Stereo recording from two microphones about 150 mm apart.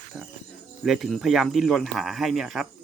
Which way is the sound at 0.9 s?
Centre (ahead or behind).